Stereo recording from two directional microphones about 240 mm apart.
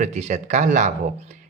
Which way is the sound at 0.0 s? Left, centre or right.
Right.